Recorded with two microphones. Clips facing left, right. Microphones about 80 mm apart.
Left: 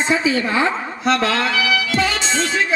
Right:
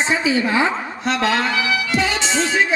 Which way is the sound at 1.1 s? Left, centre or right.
Centre.